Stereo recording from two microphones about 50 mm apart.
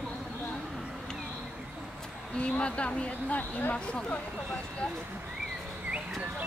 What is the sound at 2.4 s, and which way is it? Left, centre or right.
Speech, left.